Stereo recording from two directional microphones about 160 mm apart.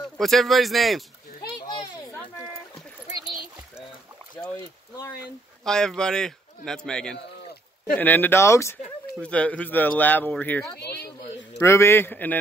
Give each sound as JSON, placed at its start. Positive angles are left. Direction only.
{"t": 0.2, "sound": "a man's voice", "side_deg": 0}
{"t": 5.7, "sound": "a man's voice", "side_deg": 5}
{"t": 9.2, "sound": "speech", "side_deg": 10}
{"t": 10.8, "sound": "a sound", "side_deg": 90}
{"t": 11.6, "sound": "speech", "side_deg": 15}